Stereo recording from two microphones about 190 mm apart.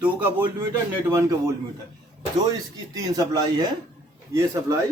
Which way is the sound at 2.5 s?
20° right (ahead or behind).